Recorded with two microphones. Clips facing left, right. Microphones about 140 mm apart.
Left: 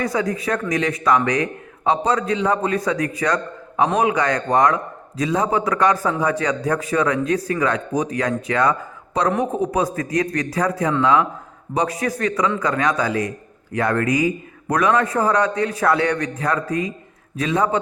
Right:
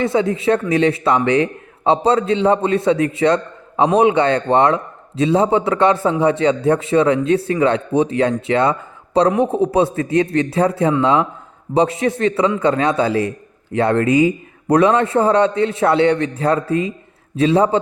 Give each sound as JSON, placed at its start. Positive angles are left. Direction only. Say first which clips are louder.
{"t": 0.0, "sound": "a man's voice", "louder": "right 5 dB", "side_deg": -25}